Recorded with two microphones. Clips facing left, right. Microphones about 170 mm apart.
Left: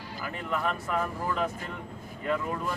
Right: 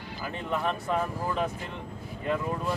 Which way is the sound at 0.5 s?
20° right (ahead or behind).